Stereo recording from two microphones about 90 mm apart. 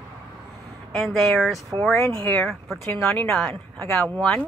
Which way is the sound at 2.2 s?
15° left (ahead or behind).